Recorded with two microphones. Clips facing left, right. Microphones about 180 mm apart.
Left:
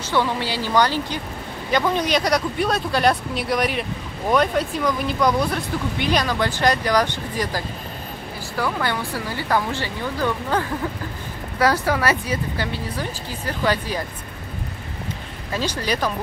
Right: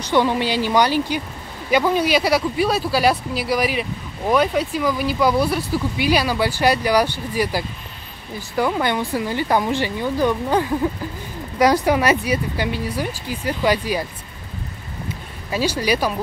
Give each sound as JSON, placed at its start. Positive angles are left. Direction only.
{"t": 0.0, "sound": "speech", "side_deg": -15}
{"t": 15.5, "sound": "speech", "side_deg": -10}